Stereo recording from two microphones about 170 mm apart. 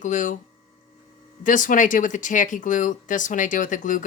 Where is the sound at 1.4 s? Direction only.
50° left (ahead or behind).